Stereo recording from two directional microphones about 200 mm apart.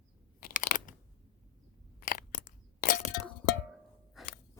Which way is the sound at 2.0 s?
45° left (ahead or behind).